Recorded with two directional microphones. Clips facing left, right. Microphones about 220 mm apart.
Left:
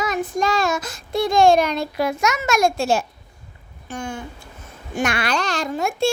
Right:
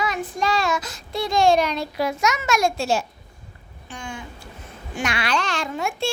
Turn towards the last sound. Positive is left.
turn(degrees=40)  # may be behind; listen again after turning